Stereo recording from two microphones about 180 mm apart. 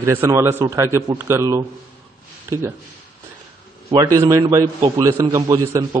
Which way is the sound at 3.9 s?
20° right (ahead or behind).